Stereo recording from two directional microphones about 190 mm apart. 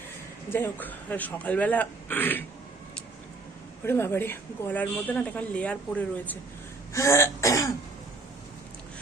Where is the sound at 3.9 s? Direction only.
15° left (ahead or behind).